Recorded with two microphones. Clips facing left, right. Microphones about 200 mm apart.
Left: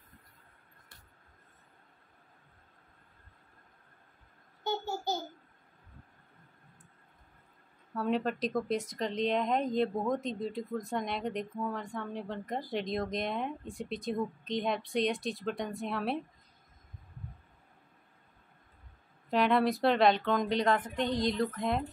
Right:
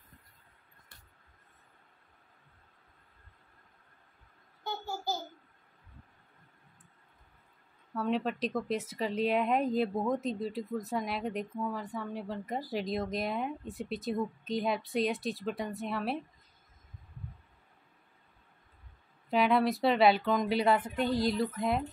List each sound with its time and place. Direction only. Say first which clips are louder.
4.6 s babbling: left 3 dB; 20° left (ahead or behind)
7.9 s speech: even; centre (ahead or behind)
19.3 s speech: even; centre (ahead or behind)